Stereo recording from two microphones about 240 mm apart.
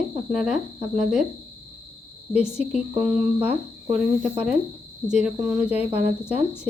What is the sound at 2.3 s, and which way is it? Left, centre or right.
Speech, centre.